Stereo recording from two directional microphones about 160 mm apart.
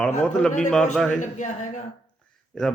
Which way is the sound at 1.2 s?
50° left (ahead or behind).